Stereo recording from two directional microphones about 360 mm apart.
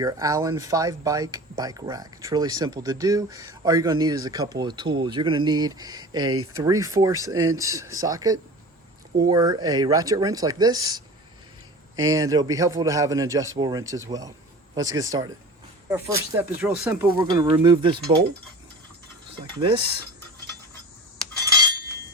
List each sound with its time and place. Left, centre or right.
0.0 s speech: centre
6.2 s speech: right
6.6 s speech: centre
12.0 s speech: centre
19.4 s speech: centre